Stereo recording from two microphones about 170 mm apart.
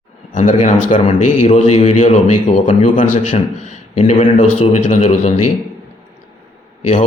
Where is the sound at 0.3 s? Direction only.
45° left (ahead or behind).